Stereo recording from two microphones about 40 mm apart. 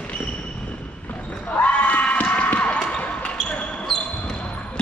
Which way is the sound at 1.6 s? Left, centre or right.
Left.